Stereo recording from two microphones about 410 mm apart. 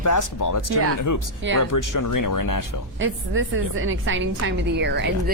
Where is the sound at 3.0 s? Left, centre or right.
Right.